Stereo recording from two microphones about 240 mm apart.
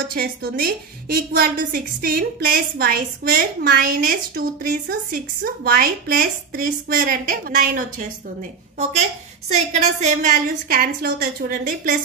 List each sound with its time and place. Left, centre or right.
0.1 s a woman's voice: right
9.5 s a woman's voice: right